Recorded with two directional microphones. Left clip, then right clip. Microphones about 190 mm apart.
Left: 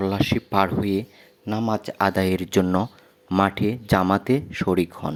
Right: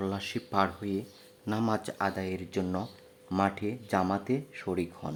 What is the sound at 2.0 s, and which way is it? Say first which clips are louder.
Speech: left 11 dB; 35° left (ahead or behind).